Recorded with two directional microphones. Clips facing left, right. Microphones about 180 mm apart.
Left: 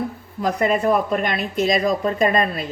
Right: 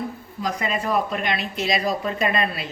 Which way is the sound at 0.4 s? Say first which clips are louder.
Left 7 dB; 55° left (ahead or behind).